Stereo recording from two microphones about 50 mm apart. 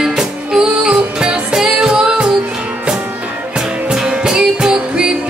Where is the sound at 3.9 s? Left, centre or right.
Centre.